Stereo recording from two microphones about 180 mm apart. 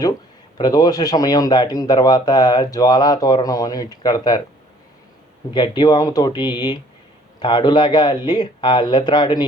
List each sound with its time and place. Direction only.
0.5 s speech: 20° left (ahead or behind)
5.5 s speech: 25° left (ahead or behind)